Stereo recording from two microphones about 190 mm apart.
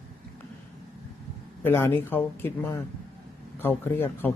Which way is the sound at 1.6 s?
10° left (ahead or behind).